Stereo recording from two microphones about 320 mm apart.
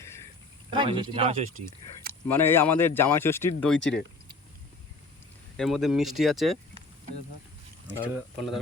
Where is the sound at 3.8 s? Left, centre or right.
Left.